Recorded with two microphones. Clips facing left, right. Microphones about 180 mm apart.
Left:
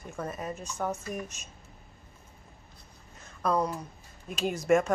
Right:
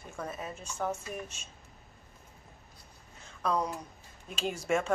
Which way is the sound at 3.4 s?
5° left (ahead or behind).